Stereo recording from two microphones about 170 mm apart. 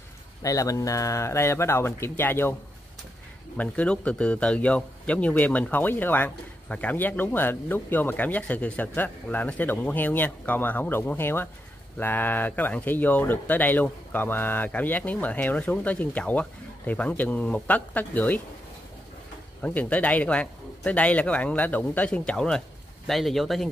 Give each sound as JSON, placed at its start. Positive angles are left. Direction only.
{"t": 0.4, "sound": "a man's voice", "side_deg": 20}
{"t": 3.5, "sound": "a man's voice", "side_deg": 10}
{"t": 19.6, "sound": "a man's voice", "side_deg": 10}